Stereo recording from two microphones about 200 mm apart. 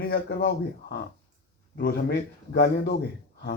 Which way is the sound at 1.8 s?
45° left (ahead or behind).